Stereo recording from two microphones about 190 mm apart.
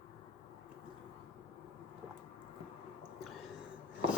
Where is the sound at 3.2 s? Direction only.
Centre (ahead or behind).